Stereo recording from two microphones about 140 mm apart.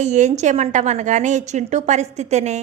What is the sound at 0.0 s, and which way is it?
A woman's voice, 55° right (ahead or behind).